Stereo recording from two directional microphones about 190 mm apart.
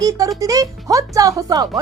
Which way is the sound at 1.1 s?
20° right (ahead or behind).